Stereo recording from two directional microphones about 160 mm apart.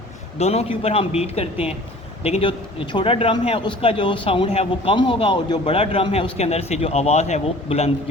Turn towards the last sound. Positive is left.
turn(degrees=40)  # may be behind; listen again after turning